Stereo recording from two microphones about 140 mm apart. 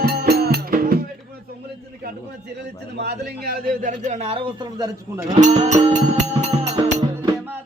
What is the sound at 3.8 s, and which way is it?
Music, 55° right (ahead or behind).